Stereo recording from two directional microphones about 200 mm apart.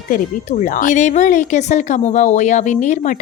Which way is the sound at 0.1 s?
40° left (ahead or behind).